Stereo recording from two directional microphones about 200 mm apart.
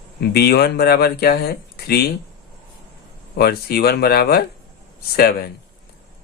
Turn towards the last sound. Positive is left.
turn(degrees=50)  # may be behind; listen again after turning